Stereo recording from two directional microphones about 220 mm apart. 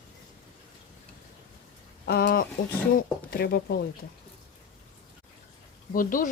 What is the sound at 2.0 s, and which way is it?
Speech, 45° left (ahead or behind).